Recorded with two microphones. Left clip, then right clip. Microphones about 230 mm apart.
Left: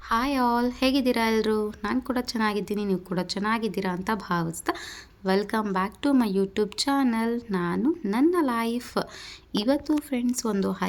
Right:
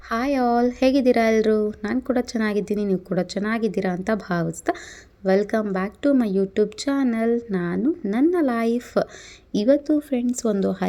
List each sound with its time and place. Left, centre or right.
0.1 s a woman's voice: centre